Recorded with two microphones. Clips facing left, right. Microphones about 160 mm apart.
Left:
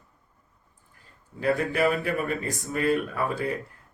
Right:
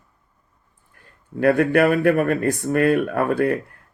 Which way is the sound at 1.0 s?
60° right (ahead or behind).